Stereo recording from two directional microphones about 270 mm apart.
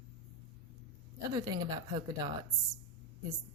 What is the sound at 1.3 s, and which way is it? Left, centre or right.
Speech, centre.